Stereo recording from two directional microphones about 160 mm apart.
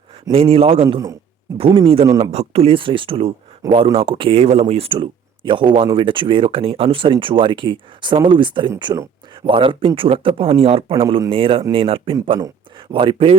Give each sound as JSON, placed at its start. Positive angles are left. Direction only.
{"t": 0.3, "sound": "speech", "side_deg": -35}
{"t": 2.3, "sound": "speech", "side_deg": -40}